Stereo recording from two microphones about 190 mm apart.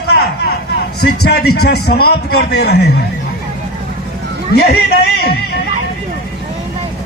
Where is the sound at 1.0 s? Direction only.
55° left (ahead or behind).